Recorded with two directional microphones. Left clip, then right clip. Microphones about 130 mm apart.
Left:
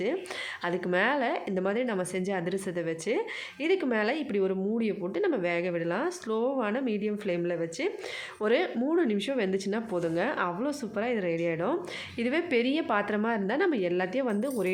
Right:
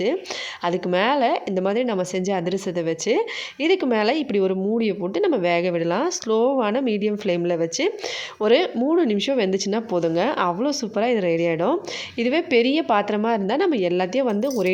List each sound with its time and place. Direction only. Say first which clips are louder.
0.6 s speech: right 6 dB; 35° right (ahead or behind)
12.2 s speech: right 8 dB; 35° right (ahead or behind)